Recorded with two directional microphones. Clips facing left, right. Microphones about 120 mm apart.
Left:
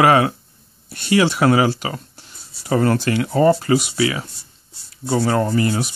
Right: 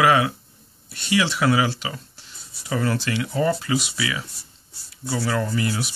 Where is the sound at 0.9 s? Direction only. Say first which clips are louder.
Left 6 dB; 45° left (ahead or behind).